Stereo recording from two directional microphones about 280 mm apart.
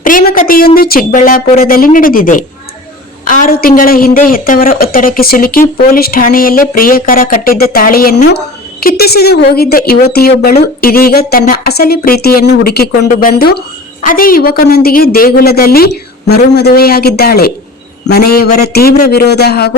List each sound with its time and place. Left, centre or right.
0.0 s a woman's voice: left